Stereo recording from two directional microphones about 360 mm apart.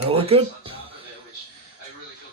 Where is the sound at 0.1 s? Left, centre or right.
Centre.